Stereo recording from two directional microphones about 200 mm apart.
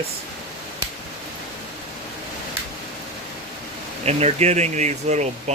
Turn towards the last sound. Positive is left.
turn(degrees=-35)  # may be behind; listen again after turning